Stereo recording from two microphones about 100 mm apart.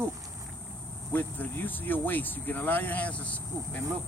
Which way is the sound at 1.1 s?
20° left (ahead or behind).